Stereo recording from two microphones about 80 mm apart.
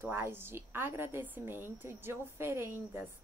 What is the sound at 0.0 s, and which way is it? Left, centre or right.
A woman's voice, right.